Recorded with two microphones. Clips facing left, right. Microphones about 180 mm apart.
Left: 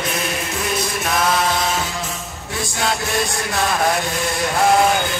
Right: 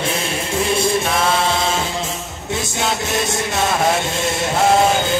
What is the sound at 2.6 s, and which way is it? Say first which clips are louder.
Music: even; 25° right (ahead or behind).